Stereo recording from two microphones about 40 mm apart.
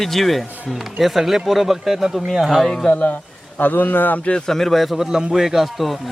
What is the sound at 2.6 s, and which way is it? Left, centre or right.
Speech, centre.